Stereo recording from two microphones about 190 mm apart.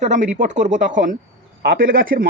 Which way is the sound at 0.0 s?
40° right (ahead or behind).